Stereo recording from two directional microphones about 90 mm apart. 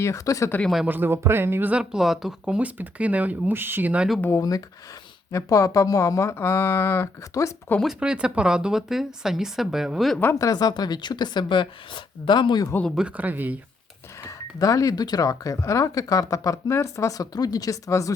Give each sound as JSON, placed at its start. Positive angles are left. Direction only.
{"t": 0.0, "sound": "speech", "side_deg": 35}
{"t": 0.9, "sound": "speech", "side_deg": -20}
{"t": 1.7, "sound": "speech", "side_deg": -10}
{"t": 3.9, "sound": "speech", "side_deg": -10}
{"t": 4.4, "sound": "speech", "side_deg": 40}
{"t": 7.9, "sound": "speech", "side_deg": -10}
{"t": 10.3, "sound": "speech", "side_deg": 45}
{"t": 13.0, "sound": "speech", "side_deg": -15}
{"t": 14.3, "sound": "speech", "side_deg": 40}